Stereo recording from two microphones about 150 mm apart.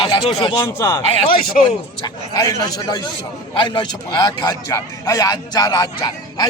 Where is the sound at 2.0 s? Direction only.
25° left (ahead or behind).